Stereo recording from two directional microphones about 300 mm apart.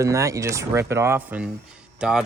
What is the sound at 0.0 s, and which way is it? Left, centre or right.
Speech, centre.